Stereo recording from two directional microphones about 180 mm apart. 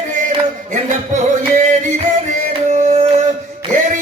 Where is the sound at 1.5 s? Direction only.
45° right (ahead or behind).